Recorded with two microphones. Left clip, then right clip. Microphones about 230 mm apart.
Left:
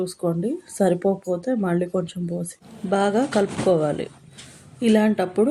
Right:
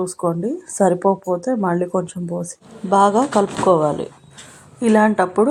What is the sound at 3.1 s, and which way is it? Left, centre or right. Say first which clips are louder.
Speech: right 4 dB; right.